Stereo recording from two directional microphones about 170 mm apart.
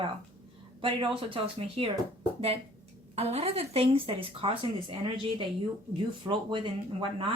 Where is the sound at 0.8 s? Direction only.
30° right (ahead or behind).